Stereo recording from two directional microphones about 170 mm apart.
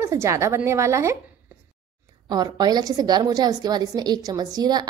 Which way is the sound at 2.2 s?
25° right (ahead or behind).